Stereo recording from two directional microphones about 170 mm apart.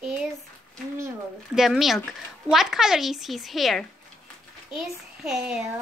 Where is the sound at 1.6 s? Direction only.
Centre (ahead or behind).